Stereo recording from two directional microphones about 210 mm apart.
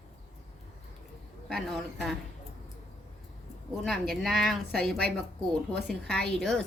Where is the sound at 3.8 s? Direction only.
Centre (ahead or behind).